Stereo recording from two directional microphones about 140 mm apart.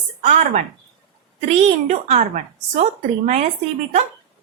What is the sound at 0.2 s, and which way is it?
Speech, 60° right (ahead or behind).